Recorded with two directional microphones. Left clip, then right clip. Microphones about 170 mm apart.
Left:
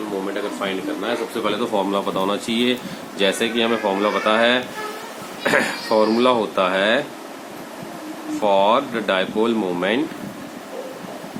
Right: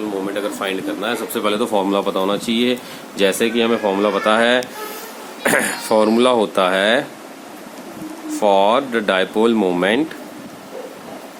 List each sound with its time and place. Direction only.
0.6 s speech: 70° right (ahead or behind)
8.4 s speech: 55° right (ahead or behind)